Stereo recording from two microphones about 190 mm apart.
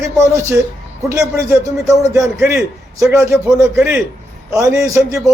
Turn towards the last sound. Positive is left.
turn(degrees=-15)  # may be behind; listen again after turning